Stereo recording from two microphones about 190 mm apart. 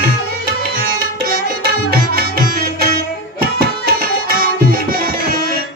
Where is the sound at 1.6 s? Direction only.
55° right (ahead or behind).